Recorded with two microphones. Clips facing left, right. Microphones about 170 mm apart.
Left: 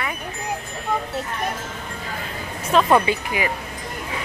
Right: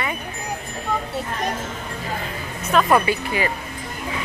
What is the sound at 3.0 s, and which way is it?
Speech, 15° left (ahead or behind).